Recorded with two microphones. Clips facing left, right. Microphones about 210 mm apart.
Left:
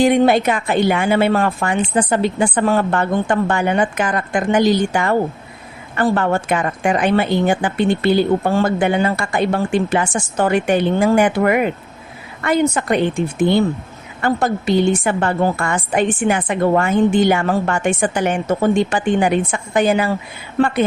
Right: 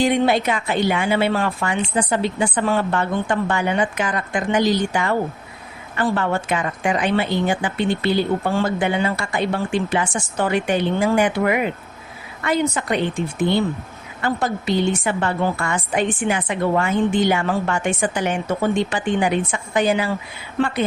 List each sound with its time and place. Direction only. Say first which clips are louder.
0.0 s a woman's voice: left 5 dB; 50° left (ahead or behind)
14.2 s a woman's voice: left 4 dB; 50° left (ahead or behind)